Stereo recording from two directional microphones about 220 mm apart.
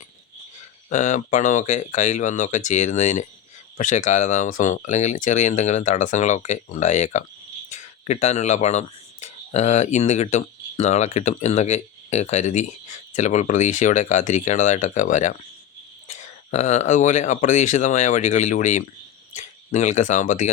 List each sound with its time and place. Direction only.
0.9 s speech: 35° left (ahead or behind)